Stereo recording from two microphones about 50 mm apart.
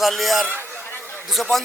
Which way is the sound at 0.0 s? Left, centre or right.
Centre.